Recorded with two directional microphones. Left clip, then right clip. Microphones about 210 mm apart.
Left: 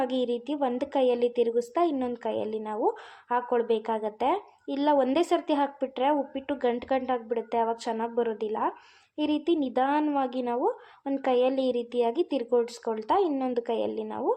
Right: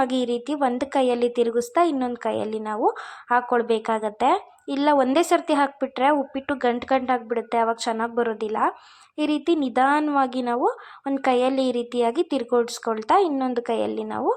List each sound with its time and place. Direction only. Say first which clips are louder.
0.0 s speech: right 5 dB; 15° right (ahead or behind)